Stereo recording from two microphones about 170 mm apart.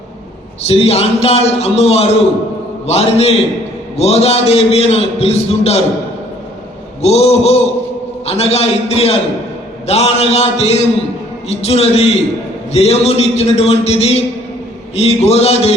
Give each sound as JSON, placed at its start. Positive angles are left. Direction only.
{"t": 0.6, "sound": "a man's voice", "side_deg": 35}
{"t": 7.0, "sound": "a man's voice", "side_deg": 40}